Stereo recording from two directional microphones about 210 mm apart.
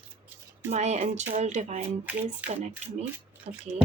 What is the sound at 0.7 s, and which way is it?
A woman's voice, 35° right (ahead or behind).